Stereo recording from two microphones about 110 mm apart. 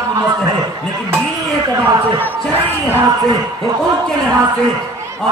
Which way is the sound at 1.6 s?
35° right (ahead or behind).